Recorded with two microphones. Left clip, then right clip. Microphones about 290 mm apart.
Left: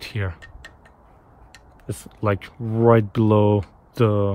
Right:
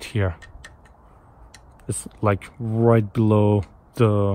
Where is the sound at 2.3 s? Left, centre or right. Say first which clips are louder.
Right 1 dB; centre.